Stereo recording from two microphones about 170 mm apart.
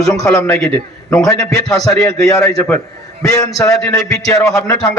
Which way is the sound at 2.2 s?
20° left (ahead or behind).